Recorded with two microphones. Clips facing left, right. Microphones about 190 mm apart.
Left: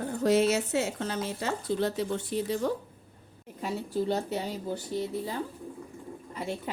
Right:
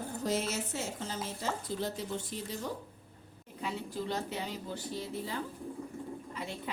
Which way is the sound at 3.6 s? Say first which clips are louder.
Left 7 dB; 40° left (ahead or behind).